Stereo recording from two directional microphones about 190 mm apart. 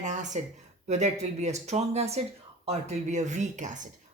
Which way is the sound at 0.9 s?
35° right (ahead or behind).